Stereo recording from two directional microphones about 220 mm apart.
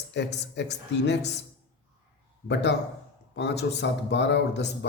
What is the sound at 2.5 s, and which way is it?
A man's voice, 50° left (ahead or behind).